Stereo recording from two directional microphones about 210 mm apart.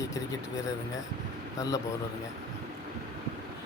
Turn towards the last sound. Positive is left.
turn(degrees=15)  # may be behind; listen again after turning